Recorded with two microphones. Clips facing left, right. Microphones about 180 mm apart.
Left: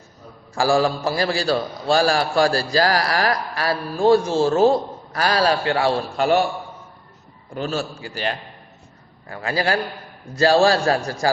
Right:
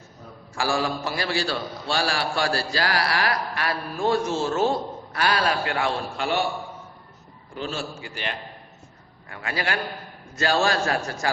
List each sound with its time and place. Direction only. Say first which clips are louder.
0.5 s a man's voice: left 7 dB; 40° left (ahead or behind)
7.5 s a man's voice: left 5 dB; 45° left (ahead or behind)